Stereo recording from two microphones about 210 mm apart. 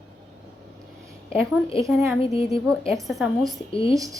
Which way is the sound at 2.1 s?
25° left (ahead or behind).